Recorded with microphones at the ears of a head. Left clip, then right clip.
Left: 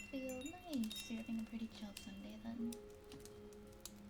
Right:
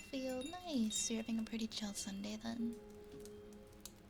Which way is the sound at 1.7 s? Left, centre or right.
Right.